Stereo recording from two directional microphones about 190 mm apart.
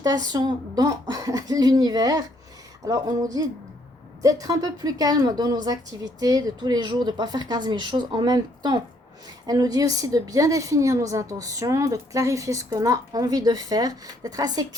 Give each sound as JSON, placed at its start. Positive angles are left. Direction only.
{"t": 0.0, "sound": "a woman's voice", "side_deg": -20}